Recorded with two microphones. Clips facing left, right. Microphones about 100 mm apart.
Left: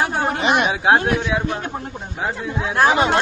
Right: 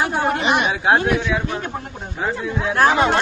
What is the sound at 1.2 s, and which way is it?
Speech, 20° left (ahead or behind).